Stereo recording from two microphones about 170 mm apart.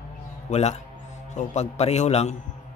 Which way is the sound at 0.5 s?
40° left (ahead or behind).